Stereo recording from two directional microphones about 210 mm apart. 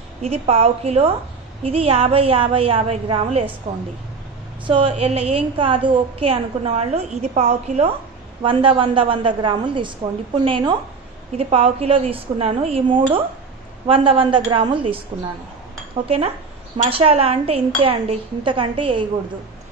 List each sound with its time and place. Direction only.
0.2 s a woman's voice: 30° right (ahead or behind)
16.7 s a woman's voice: 30° right (ahead or behind)